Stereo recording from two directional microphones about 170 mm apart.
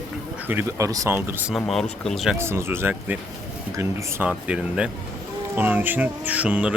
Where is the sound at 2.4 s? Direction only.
15° right (ahead or behind).